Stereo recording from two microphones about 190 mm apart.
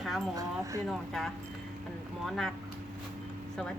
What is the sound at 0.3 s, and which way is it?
Speech, 15° right (ahead or behind).